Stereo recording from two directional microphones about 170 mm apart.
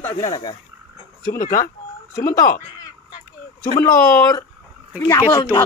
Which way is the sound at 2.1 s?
20° left (ahead or behind).